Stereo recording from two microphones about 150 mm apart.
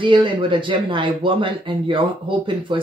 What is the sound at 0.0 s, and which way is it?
Speech, 30° right (ahead or behind).